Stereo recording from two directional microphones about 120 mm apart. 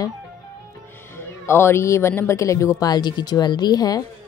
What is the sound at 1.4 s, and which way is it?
Speech, 20° left (ahead or behind).